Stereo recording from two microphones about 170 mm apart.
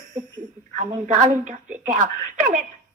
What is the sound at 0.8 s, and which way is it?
Speech, 45° right (ahead or behind).